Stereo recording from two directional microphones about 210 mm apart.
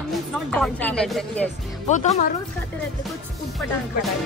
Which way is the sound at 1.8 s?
35° left (ahead or behind).